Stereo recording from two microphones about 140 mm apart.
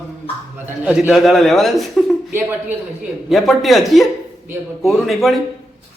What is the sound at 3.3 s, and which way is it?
A man's voice, centre (ahead or behind).